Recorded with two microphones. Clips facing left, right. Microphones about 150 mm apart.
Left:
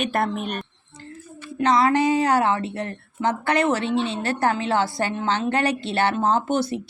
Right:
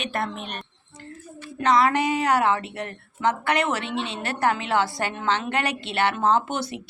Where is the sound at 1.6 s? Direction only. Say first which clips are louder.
Left 2 dB; 25° left (ahead or behind).